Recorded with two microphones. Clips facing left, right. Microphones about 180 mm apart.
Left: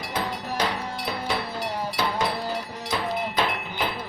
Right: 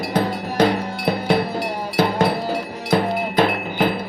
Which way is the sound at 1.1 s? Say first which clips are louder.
Right 11 dB; 60° right (ahead or behind).